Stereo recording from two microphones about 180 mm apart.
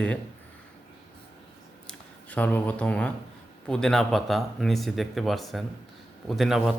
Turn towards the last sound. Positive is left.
turn(degrees=0)  # may be behind; listen again after turning